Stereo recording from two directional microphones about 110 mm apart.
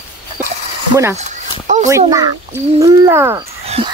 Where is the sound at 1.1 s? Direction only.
90° right.